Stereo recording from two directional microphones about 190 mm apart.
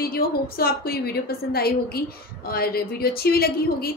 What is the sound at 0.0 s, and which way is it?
A woman's voice, 55° left (ahead or behind).